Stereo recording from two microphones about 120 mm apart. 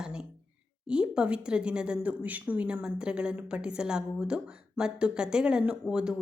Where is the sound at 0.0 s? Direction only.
5° right (ahead or behind).